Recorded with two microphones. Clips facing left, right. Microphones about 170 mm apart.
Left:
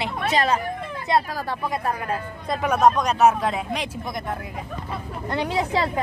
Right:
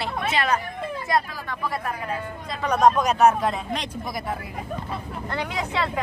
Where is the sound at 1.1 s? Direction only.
25° left (ahead or behind).